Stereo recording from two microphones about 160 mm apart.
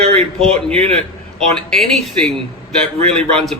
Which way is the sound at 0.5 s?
40° right (ahead or behind).